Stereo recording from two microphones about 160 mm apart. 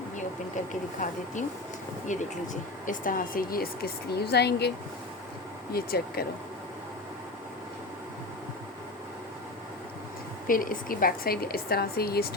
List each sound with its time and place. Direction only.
2.1 s a woman's voice: 50° left (ahead or behind); by 4.7 s 90° left
5.7 s a woman's voice: 75° left (ahead or behind)
10.4 s a woman's voice: 60° left (ahead or behind)